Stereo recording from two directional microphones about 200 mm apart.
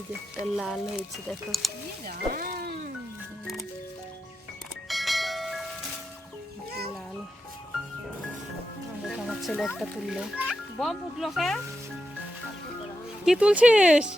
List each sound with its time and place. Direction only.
0.4 s a child's voice: centre (ahead or behind)
2.0 s music: 45° right (ahead or behind)
4.9 s bell: centre (ahead or behind)
6.7 s music: 50° right (ahead or behind)
9.0 s music: centre (ahead or behind)
9.7 s a child's voice: 5° right (ahead or behind)
13.2 s a child's voice: 5° right (ahead or behind)